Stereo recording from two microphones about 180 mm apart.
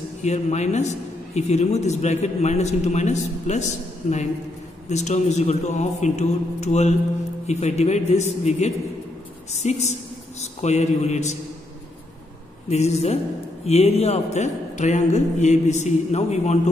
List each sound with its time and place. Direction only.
0.2 s a man's voice: 40° left (ahead or behind)
12.6 s a man's voice: 35° left (ahead or behind)